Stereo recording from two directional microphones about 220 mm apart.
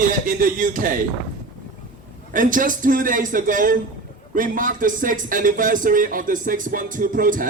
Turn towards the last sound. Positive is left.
turn(degrees=-40)  # may be behind; listen again after turning